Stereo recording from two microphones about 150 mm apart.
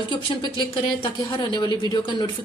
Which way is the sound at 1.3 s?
30° left (ahead or behind).